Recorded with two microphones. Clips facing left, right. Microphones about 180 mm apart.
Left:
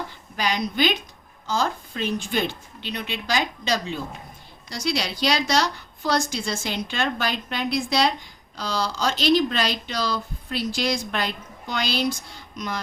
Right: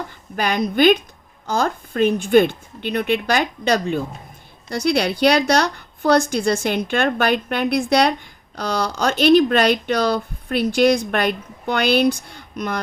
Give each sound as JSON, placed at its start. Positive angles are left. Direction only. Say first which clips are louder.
{"t": 0.3, "sound": "speech", "louder": "right 6 dB", "side_deg": -55}